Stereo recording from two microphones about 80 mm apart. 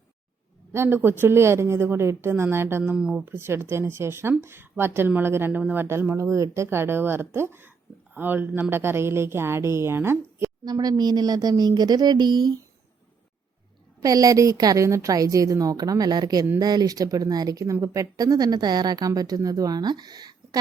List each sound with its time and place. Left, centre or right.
0.7 s a woman's voice: right
2.9 s speech: centre
3.2 s a woman's voice: right
10.7 s a woman's voice: right
14.0 s a woman's voice: right